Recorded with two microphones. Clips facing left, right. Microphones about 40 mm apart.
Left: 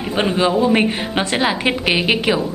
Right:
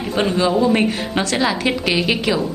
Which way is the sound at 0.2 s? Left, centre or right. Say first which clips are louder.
Even; centre.